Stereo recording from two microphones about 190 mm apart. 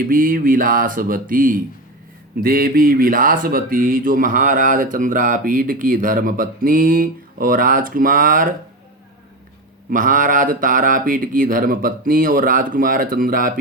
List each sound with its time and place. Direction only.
0.0 s speech: 45° right (ahead or behind)
9.9 s speech: 45° right (ahead or behind)